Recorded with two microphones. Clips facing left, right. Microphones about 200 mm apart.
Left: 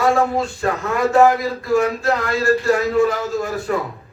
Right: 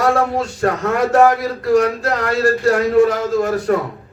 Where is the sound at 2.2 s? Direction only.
65° right (ahead or behind).